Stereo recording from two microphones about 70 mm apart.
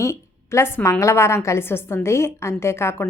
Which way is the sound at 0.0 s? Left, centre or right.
Left.